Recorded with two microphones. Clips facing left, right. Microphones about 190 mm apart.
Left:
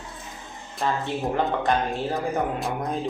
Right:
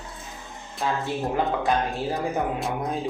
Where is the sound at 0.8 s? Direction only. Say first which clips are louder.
Left 1 dB; centre (ahead or behind).